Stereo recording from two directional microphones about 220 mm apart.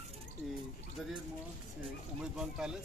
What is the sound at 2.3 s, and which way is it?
Speech, 5° right (ahead or behind).